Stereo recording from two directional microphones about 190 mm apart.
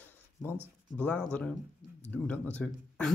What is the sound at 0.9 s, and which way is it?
Speech, 5° left (ahead or behind).